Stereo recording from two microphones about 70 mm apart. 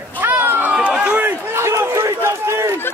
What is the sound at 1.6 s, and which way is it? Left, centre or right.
Run, right.